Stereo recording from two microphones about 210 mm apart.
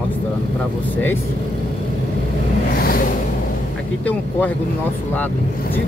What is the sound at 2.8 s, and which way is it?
Vehicle, 45° left (ahead or behind).